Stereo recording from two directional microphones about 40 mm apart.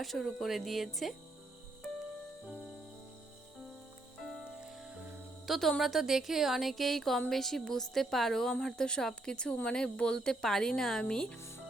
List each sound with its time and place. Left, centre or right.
0.0 s speech: centre
4.2 s music: centre
5.5 s a woman's voice: centre
5.8 s a woman's voice: centre; by 11.3 s left